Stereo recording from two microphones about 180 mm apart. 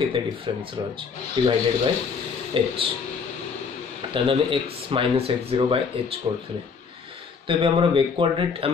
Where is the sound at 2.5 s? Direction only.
30° right (ahead or behind).